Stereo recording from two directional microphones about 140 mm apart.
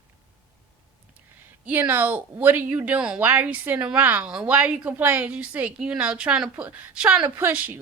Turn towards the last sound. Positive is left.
turn(degrees=-15)  # may be behind; listen again after turning